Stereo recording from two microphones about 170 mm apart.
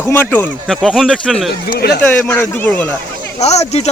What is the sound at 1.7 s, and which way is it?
Speech, 70° left (ahead or behind).